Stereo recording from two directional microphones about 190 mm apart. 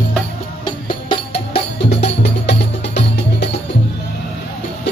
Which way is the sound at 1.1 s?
30° left (ahead or behind).